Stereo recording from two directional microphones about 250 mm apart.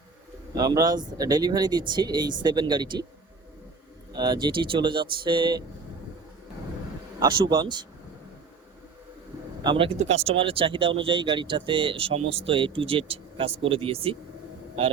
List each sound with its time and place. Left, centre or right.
0.5 s speech: centre
4.1 s speech: centre
7.3 s a man's voice: right
7.5 s speech: centre
9.6 s speech: right